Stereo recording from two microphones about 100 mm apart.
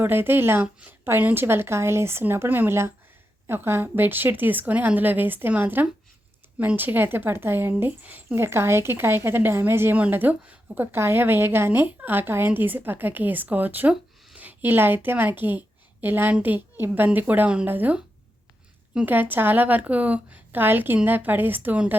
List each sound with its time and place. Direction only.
0.0 s a woman's voice: 20° right (ahead or behind)